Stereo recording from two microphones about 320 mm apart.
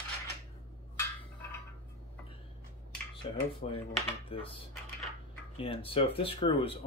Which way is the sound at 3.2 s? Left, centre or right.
Centre.